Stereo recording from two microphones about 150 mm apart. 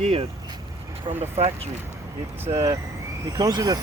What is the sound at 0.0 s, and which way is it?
Speech, 45° right (ahead or behind).